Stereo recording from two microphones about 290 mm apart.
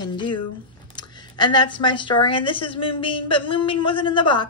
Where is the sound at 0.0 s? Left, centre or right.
Centre.